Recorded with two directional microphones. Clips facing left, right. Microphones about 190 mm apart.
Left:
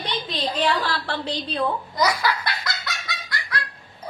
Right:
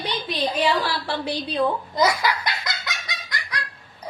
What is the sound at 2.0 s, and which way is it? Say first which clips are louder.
Belly laugh: right 1 dB; 20° right (ahead or behind).